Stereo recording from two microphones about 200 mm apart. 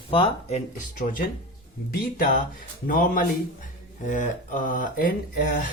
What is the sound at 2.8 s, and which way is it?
Speech, 45° left (ahead or behind).